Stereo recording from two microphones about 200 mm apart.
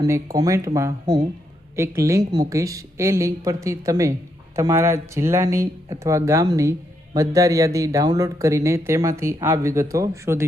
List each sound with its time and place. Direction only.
0.0 s speech: 15° right (ahead or behind)